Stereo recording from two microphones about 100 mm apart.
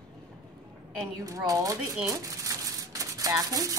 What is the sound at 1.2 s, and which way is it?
Speech, 35° right (ahead or behind).